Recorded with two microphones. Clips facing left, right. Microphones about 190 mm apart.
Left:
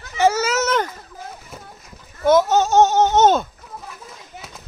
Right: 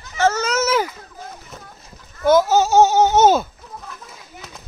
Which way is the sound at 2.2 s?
Centre (ahead or behind).